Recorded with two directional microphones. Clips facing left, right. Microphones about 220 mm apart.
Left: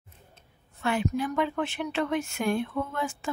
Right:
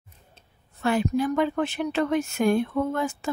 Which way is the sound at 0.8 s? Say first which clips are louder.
Right 4 dB; 40° right (ahead or behind).